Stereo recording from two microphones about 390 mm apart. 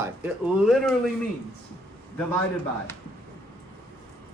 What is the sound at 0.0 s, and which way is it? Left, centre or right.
Speech, centre.